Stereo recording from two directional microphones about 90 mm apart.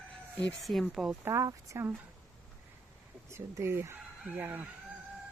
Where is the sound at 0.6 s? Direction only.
Centre (ahead or behind).